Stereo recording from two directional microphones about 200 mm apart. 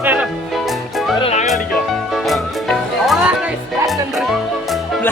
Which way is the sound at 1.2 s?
35° left (ahead or behind).